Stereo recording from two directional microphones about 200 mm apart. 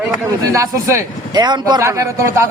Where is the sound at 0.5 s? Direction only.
15° right (ahead or behind).